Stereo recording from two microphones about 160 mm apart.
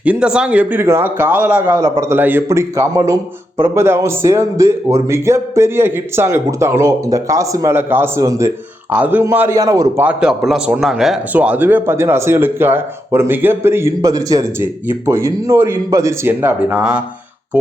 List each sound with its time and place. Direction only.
0.0 s speech: 5° right (ahead or behind)
10.1 s speech: 5° right (ahead or behind)